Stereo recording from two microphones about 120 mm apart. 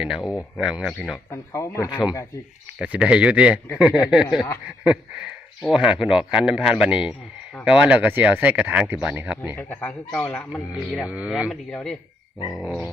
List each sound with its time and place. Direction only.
0.0 s speech: 5° right (ahead or behind)
1.1 s speech: 25° left (ahead or behind)
1.9 s speech: 10° right (ahead or behind)
9.6 s speech: 10° left (ahead or behind)
11.0 s speech: 10° right (ahead or behind)
11.7 s a man's voice: 5° left (ahead or behind)